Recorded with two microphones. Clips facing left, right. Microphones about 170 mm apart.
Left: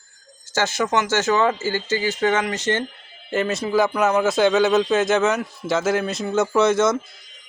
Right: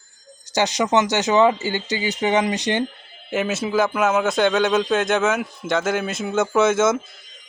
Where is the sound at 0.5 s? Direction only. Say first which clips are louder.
Right 2 dB; 20° right (ahead or behind).